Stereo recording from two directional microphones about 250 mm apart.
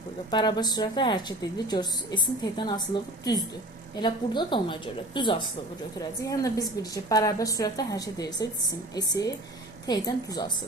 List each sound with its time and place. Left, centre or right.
0.3 s a woman's voice: centre